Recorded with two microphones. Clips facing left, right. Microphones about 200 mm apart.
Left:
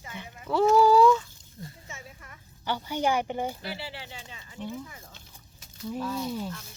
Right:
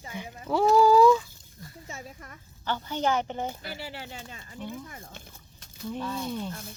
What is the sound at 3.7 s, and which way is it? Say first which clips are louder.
Speech: even; 45° right (ahead or behind).